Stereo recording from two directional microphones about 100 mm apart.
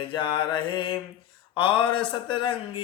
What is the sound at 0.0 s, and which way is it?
Speech, 55° left (ahead or behind).